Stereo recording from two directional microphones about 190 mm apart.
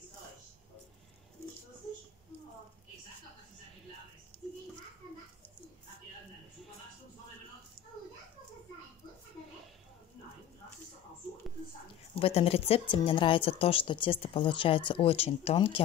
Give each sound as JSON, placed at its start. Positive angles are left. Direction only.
{"t": 12.2, "sound": "a woman's voice", "side_deg": 30}